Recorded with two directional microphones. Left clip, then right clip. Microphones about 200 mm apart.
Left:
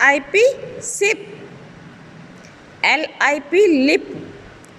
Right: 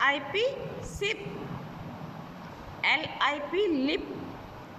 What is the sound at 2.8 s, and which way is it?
Speech, 45° left (ahead or behind).